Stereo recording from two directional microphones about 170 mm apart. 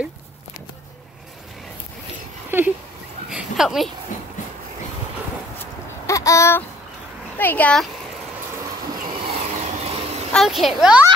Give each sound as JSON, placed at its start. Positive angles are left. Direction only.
{"t": 2.5, "sound": "speech", "side_deg": -15}
{"t": 3.3, "sound": "a sound", "side_deg": -5}
{"t": 6.0, "sound": "a sound", "side_deg": 20}
{"t": 7.3, "sound": "speech", "side_deg": 10}
{"t": 9.2, "sound": "vehicle", "side_deg": -40}
{"t": 10.3, "sound": "a child's voice", "side_deg": 0}